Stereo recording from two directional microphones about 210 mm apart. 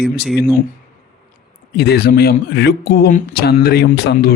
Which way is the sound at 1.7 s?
50° left (ahead or behind).